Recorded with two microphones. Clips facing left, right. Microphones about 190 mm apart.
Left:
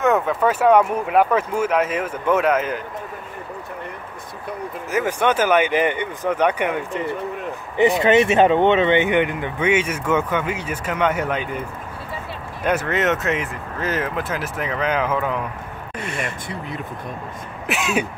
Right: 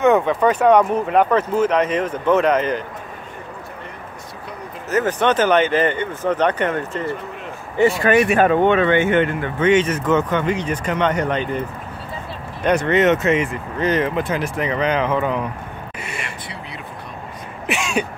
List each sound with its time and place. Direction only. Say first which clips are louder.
0.0 s speech: right 3 dB; centre (ahead or behind)
4.9 s speech: right 2 dB; 10° left (ahead or behind)
12.6 s speech: right 5 dB; 5° left (ahead or behind)
16.2 s vehicle: left 4 dB; 50° left (ahead or behind)
17.6 s speech: even; 5° left (ahead or behind)